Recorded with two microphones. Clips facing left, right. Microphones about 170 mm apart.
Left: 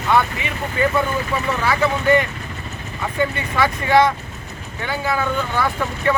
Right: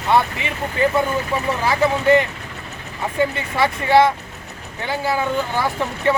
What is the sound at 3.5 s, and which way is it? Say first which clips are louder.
Speech: right 1 dB; 30° right (ahead or behind).